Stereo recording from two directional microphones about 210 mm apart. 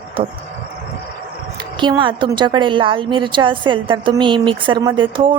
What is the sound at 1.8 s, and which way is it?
A woman's voice, 20° right (ahead or behind).